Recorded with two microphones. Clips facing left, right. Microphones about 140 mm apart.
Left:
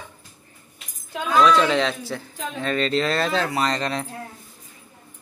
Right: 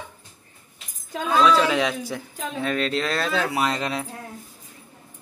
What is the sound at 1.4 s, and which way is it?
Speech, 5° right (ahead or behind).